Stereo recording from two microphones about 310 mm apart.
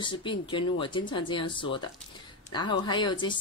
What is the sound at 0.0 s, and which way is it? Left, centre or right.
Speech, centre.